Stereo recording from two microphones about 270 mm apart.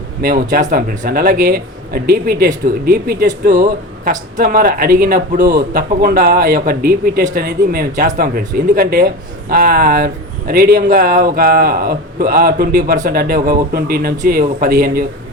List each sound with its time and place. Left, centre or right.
0.2 s speech: right